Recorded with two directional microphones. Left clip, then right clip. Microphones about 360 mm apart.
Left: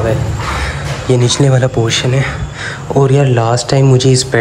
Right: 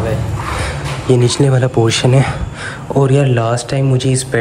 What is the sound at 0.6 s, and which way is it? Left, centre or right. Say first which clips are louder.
Speech: left 2 dB; centre.